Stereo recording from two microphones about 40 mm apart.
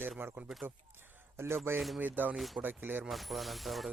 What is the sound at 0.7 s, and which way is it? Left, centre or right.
Speech, right.